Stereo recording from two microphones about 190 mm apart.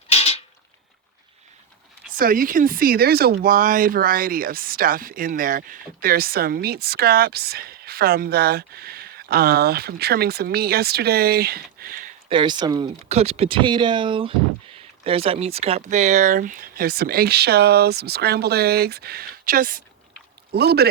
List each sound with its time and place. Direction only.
0.1 s a sound: 35° left (ahead or behind)
2.1 s speech: 45° right (ahead or behind)
12.3 s speech: 25° right (ahead or behind)
13.1 s speech: 35° right (ahead or behind); by 20.8 s 55° right (ahead or behind)